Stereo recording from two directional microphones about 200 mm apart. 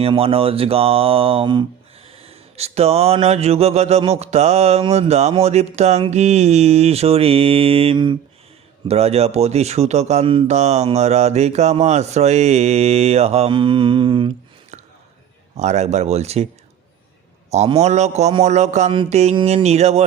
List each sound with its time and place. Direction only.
0.0 s speech: 30° right (ahead or behind)
17.5 s speech: 30° right (ahead or behind)